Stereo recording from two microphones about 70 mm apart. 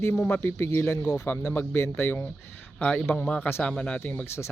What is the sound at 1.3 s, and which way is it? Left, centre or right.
Speech, left.